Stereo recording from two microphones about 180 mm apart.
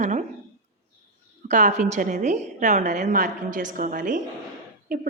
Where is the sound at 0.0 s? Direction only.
45° right (ahead or behind).